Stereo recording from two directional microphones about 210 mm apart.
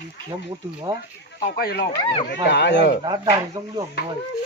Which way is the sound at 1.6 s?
50° left (ahead or behind).